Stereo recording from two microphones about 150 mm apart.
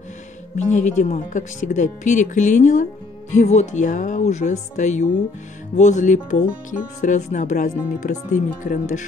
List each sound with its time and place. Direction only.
0.6 s speech: 50° left (ahead or behind)